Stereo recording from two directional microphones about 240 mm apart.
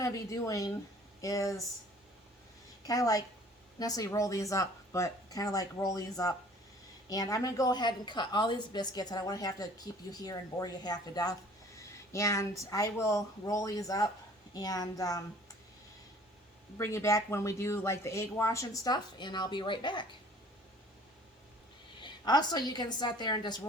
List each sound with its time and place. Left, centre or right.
0.0 s a woman's voice: centre
2.8 s a woman's voice: centre
16.7 s a woman's voice: centre
22.0 s a woman's voice: centre